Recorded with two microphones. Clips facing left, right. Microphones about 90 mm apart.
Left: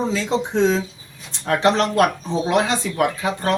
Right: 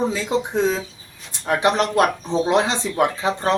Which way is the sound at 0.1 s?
15° right (ahead or behind).